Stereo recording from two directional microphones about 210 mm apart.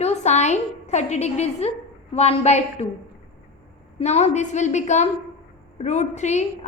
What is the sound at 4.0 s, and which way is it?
A woman's voice, 30° left (ahead or behind).